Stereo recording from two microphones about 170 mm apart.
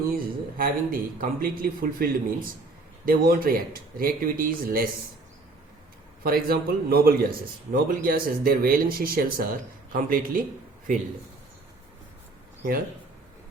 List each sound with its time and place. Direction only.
0.1 s a man's voice: 60° right (ahead or behind)
6.2 s a man's voice: 60° right (ahead or behind)